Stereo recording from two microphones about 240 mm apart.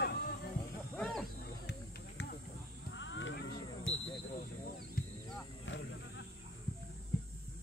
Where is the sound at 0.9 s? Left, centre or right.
Centre.